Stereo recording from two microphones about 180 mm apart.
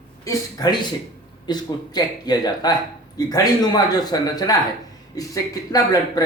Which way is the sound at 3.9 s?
20° left (ahead or behind).